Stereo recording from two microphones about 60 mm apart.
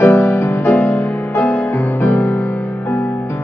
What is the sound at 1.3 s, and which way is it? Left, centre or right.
Music, left.